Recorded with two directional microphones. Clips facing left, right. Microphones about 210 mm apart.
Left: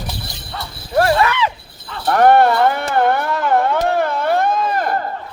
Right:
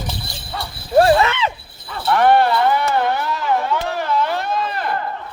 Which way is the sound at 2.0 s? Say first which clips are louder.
Left 3 dB; 45° left (ahead or behind).